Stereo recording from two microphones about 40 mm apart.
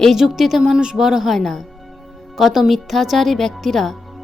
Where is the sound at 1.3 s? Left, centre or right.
Centre.